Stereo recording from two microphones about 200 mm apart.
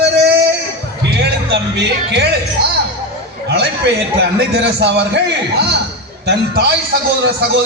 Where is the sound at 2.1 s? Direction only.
55° right (ahead or behind).